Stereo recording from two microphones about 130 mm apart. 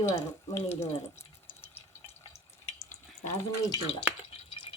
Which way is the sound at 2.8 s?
60° left (ahead or behind).